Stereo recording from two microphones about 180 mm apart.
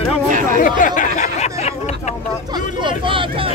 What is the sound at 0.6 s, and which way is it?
Speech, 50° left (ahead or behind).